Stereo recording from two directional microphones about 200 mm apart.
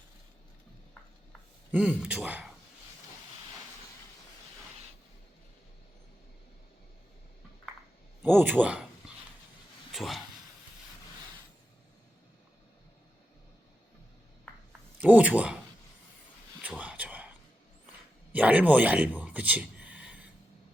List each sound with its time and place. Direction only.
1.7 s speech: 5° right (ahead or behind)
8.2 s a sound: 10° right (ahead or behind)
9.9 s a man's voice: centre (ahead or behind)
14.9 s speech: 5° right (ahead or behind)
16.6 s a sound: 5° right (ahead or behind)
18.3 s speech: 5° right (ahead or behind)